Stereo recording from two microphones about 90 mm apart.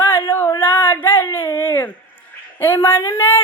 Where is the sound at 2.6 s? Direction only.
20° left (ahead or behind).